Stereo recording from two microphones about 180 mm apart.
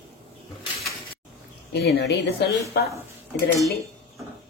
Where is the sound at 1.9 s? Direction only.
65° left (ahead or behind).